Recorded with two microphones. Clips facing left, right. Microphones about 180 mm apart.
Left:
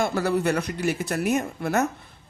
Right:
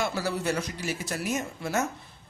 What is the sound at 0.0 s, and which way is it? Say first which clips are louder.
Speech: left 6 dB; 55° left (ahead or behind).